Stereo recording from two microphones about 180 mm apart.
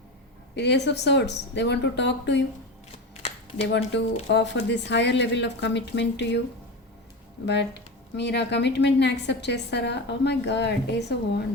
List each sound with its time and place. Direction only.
0.5 s speech: 70° left (ahead or behind)
3.2 s a sound: 30° left (ahead or behind)
3.9 s speech: 75° left (ahead or behind)
7.4 s speech: 70° left (ahead or behind)